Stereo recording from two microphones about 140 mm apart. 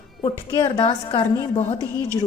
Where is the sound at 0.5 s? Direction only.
35° left (ahead or behind).